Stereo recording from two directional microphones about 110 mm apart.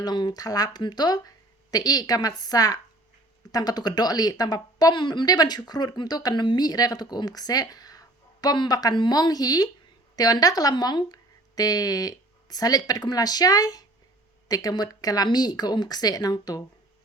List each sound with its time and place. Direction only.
0.0 s speech: 40° left (ahead or behind)